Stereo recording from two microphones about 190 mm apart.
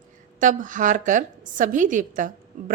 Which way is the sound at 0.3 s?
45° right (ahead or behind).